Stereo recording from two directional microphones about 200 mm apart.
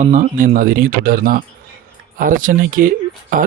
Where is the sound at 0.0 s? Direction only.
40° right (ahead or behind).